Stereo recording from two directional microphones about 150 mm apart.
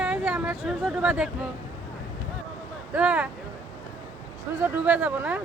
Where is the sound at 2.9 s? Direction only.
10° right (ahead or behind).